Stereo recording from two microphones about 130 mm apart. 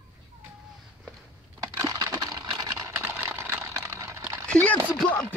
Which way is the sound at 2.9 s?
20° right (ahead or behind).